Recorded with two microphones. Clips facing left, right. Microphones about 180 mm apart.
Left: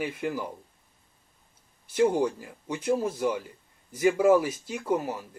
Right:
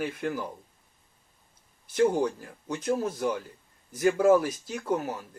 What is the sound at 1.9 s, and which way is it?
Speech, 5° left (ahead or behind).